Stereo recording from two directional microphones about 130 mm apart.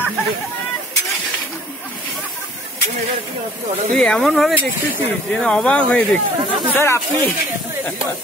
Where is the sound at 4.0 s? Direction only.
5° left (ahead or behind).